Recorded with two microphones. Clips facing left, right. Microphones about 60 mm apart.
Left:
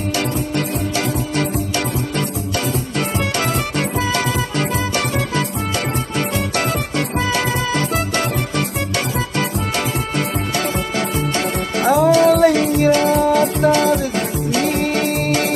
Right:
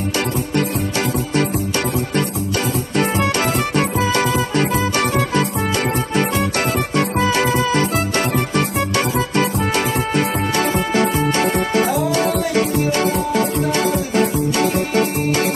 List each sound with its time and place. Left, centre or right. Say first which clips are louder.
3.7 s music: right 2 dB; right
7.0 s music: right 3 dB; right
10.1 s music: right 3 dB; right
13.7 s music: left 1 dB; right